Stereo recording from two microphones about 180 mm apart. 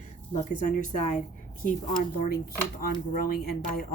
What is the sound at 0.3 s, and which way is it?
Speech, 45° left (ahead or behind).